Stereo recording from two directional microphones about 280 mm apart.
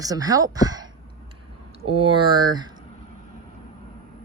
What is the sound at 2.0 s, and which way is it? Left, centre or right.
Speech, centre.